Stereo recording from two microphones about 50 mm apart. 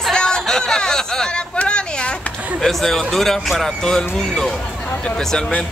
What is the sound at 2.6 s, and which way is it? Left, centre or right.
Speech, centre.